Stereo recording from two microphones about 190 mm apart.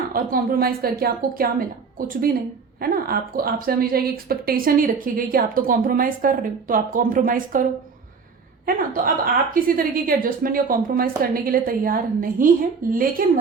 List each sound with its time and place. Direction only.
0.1 s a woman's voice: 50° right (ahead or behind)
8.6 s a woman's voice: 50° right (ahead or behind)